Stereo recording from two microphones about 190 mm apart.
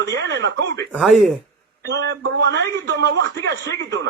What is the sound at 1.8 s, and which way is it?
A man's voice, 60° right (ahead or behind).